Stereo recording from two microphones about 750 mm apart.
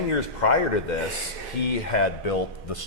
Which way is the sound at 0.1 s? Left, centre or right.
Left.